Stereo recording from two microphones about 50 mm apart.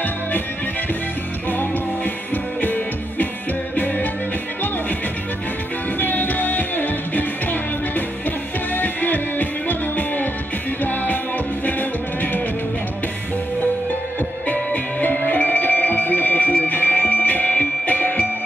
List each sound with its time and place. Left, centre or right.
2.6 s music: left
5.9 s music: left
8.7 s music: left
14.5 s music: left